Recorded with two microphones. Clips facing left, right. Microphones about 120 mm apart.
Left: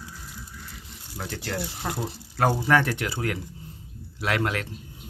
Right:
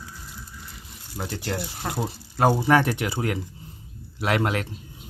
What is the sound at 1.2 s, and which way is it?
Speech, 20° right (ahead or behind).